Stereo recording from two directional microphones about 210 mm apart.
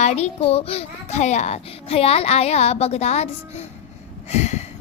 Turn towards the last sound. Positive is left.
turn(degrees=30)  # may be behind; listen again after turning